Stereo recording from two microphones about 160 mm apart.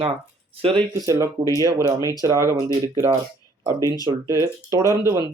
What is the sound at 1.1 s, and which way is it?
Speech, 20° right (ahead or behind).